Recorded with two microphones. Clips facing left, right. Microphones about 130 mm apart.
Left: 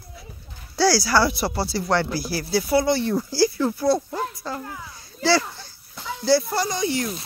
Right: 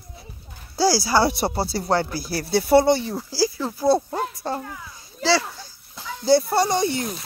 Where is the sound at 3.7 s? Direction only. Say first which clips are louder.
Right 2 dB; 25° right (ahead or behind).